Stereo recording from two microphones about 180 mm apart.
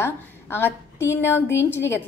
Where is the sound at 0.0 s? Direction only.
10° left (ahead or behind).